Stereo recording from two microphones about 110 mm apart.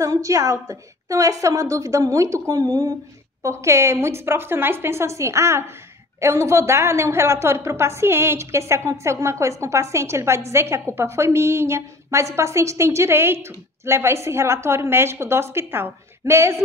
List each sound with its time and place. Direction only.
0.0 s a woman's voice: 30° right (ahead or behind)